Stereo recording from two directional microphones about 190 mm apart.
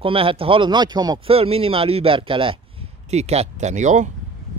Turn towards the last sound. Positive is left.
turn(degrees=-40)  # may be behind; listen again after turning